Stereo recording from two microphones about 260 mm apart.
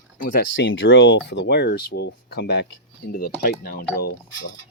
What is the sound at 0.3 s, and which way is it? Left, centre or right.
Speech, left.